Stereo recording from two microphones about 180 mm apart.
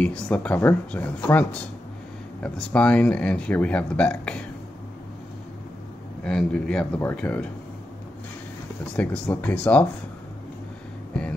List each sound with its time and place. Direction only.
0.0 s speech: 5° left (ahead or behind)
2.4 s speech: 5° left (ahead or behind)
6.2 s speech: 5° left (ahead or behind)
8.9 s speech: 10° left (ahead or behind)